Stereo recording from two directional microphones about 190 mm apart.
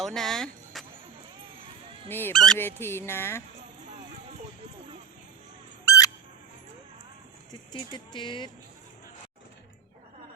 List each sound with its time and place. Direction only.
0.0 s speech: centre (ahead or behind)
2.0 s speech: 10° left (ahead or behind)
5.8 s squeak: 15° left (ahead or behind)
7.7 s speech: 25° left (ahead or behind)